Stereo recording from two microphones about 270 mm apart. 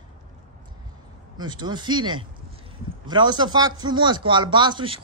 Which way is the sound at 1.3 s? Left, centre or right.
Centre.